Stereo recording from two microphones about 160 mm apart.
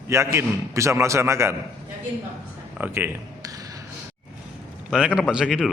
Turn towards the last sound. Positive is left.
turn(degrees=-5)  # may be behind; listen again after turning